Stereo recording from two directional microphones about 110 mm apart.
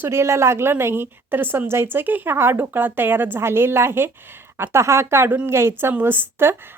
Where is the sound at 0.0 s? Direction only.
25° right (ahead or behind).